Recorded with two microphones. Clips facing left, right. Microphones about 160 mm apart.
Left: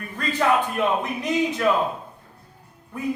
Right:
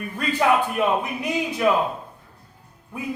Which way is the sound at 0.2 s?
10° right (ahead or behind).